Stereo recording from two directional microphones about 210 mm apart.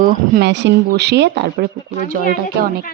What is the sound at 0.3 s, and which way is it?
Speech, 55° right (ahead or behind).